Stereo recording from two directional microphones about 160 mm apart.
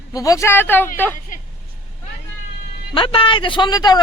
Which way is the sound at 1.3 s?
55° left (ahead or behind).